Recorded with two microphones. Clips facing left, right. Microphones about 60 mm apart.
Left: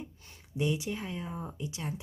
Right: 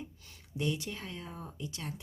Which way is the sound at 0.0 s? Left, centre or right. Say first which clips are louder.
Left 1 dB; left.